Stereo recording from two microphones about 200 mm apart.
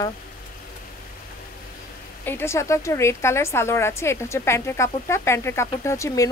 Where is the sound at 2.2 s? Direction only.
10° left (ahead or behind).